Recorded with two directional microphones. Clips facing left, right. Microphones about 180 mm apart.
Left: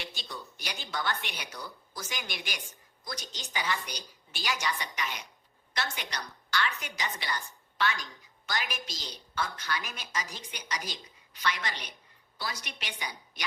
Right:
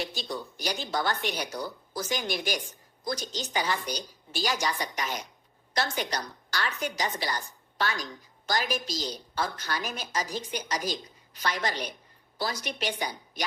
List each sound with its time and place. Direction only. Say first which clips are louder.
0.0 s a woman's voice: right 8 dB; 40° right (ahead or behind)